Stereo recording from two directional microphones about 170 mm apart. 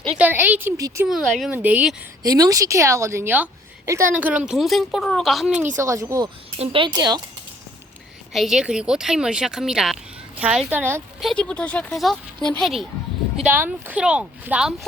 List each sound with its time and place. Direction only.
0.2 s a woman's voice: 10° right (ahead or behind)
1.0 s a woman's voice: centre (ahead or behind)
2.2 s a woman's voice: 20° right (ahead or behind); by 5.6 s centre (ahead or behind)
5.7 s speech: 20° right (ahead or behind)
8.3 s speech: centre (ahead or behind)
11.2 s a woman's voice: 5° left (ahead or behind)